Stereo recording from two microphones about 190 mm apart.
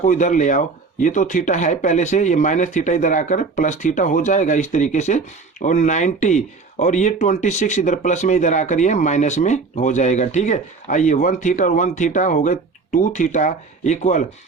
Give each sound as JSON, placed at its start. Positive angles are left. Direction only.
{"t": 0.0, "sound": "speech", "side_deg": 40}